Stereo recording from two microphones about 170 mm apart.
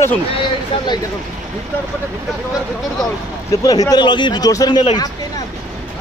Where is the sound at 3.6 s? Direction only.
20° left (ahead or behind).